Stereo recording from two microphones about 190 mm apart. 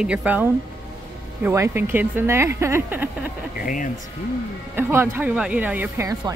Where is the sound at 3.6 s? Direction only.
45° left (ahead or behind).